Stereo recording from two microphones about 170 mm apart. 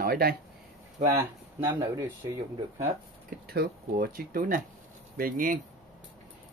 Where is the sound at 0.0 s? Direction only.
65° right (ahead or behind).